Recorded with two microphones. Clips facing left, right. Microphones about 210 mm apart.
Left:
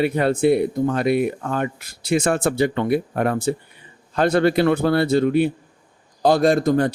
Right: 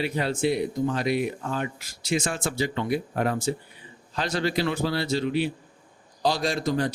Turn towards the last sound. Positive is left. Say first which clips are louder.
# left 9 dB
turn(degrees=55)  # may be behind; listen again after turning